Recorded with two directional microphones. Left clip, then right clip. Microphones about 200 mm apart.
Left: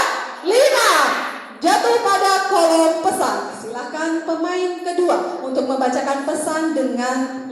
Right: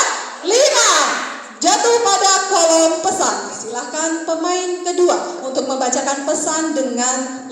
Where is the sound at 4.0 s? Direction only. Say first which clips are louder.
Right 1 dB; 40° right (ahead or behind).